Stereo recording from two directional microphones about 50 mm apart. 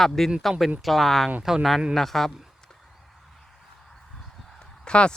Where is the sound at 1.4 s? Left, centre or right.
Centre.